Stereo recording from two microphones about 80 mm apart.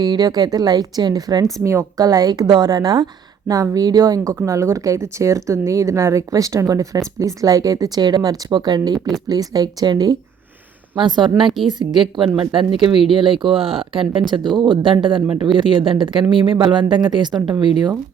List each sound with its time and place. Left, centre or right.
0.0 s a woman's voice: right
1.5 s speech: right
2.5 s a woman's voice: right
10.9 s a woman's voice: right
14.3 s a woman's voice: right